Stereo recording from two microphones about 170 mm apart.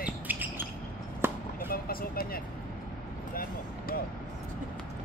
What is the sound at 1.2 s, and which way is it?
Chop, 15° right (ahead or behind).